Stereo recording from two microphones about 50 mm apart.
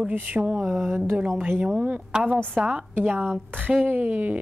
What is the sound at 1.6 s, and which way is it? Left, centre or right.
A woman's voice, right.